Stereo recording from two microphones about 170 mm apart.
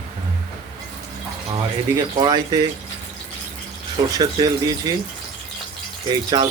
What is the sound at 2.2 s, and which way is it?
Speech, 20° right (ahead or behind).